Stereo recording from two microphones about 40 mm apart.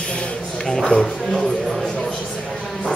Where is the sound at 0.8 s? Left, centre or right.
Centre.